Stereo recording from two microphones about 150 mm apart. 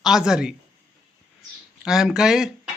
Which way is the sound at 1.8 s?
Centre (ahead or behind).